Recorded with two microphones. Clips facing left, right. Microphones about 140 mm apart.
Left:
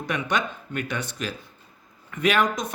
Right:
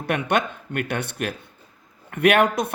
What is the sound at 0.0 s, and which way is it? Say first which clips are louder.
Speech: right 4 dB; 60° right (ahead or behind).